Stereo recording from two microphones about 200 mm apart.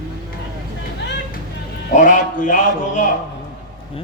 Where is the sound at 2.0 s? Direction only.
40° left (ahead or behind).